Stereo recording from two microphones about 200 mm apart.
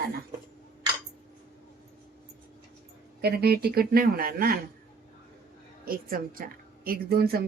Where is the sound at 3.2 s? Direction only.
50° right (ahead or behind).